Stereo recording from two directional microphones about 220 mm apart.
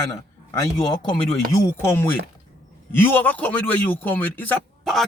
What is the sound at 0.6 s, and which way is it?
A man's voice, 20° left (ahead or behind).